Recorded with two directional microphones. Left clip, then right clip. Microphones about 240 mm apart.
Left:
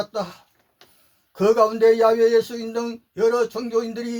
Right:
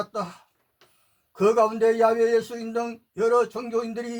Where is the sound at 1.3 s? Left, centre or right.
Left.